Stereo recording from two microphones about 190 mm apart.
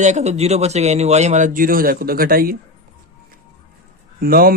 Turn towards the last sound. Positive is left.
turn(degrees=-50)  # may be behind; listen again after turning